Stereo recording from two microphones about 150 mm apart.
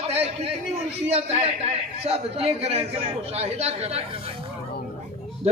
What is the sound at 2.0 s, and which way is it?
Speech, 40° right (ahead or behind).